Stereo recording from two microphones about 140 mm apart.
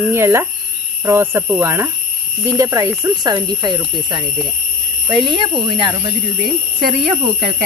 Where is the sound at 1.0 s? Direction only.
20° right (ahead or behind).